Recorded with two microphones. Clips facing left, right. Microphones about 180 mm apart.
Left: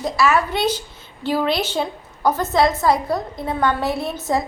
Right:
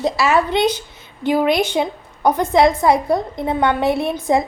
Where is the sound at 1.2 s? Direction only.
15° right (ahead or behind).